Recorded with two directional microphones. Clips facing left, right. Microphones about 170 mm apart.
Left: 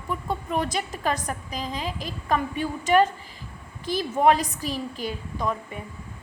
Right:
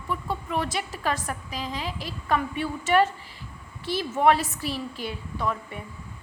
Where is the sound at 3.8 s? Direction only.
40° left (ahead or behind).